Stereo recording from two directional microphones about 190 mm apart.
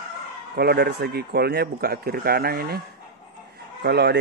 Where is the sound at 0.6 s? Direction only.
60° right (ahead or behind).